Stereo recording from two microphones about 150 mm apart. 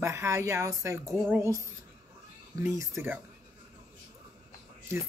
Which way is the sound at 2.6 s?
15° right (ahead or behind).